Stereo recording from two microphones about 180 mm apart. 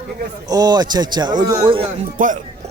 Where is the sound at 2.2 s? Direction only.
50° right (ahead or behind).